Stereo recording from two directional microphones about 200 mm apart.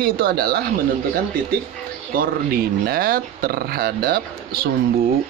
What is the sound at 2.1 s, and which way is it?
Speech, 45° right (ahead or behind).